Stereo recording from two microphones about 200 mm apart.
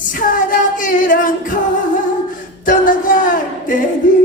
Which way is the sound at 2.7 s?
40° left (ahead or behind).